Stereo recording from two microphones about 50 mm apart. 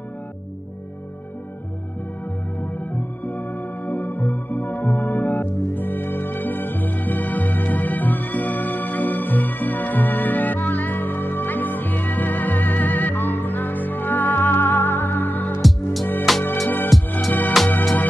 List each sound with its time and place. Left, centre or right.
2.6 s music: left
15.6 s music: centre
16.6 s music: left